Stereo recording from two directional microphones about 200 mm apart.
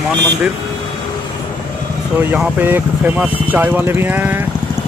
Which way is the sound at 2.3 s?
10° right (ahead or behind).